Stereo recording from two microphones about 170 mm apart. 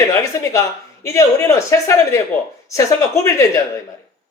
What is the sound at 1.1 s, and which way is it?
Speech, 15° left (ahead or behind).